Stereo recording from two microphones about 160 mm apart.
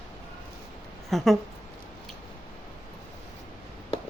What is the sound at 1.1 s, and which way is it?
Speech, centre (ahead or behind).